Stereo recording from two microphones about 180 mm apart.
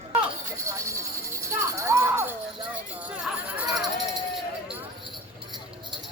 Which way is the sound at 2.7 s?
5° right (ahead or behind).